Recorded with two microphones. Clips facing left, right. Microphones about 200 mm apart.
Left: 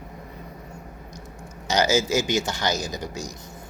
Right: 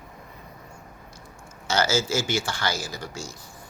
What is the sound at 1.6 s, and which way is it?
Speech, 15° left (ahead or behind).